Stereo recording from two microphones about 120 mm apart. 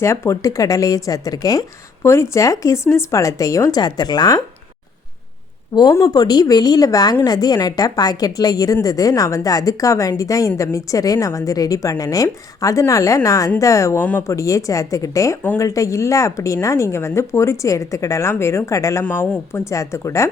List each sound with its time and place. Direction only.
0.0 s speech: 20° left (ahead or behind)
5.7 s a woman's voice: 35° left (ahead or behind)
14.0 s speech: 15° left (ahead or behind)
14.3 s speech: 25° left (ahead or behind)
19.0 s speech: 15° left (ahead or behind)